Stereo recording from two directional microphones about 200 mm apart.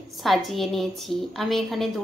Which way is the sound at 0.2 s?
Centre (ahead or behind).